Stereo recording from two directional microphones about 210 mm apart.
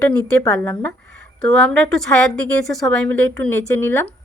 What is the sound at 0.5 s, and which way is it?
A woman's voice, 5° left (ahead or behind).